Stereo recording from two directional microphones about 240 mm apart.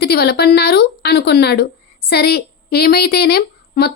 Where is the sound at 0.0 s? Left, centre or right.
Left.